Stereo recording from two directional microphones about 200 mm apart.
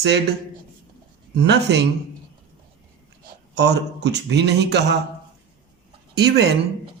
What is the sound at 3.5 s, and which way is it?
Speech, 55° right (ahead or behind).